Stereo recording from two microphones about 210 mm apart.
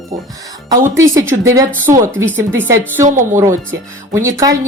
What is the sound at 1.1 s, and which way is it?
Speech, 15° right (ahead or behind).